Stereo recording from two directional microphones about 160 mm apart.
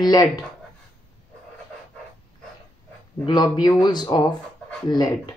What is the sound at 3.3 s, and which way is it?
Speech, 25° left (ahead or behind).